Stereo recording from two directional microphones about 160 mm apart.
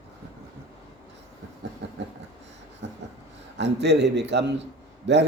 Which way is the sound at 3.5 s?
90° right.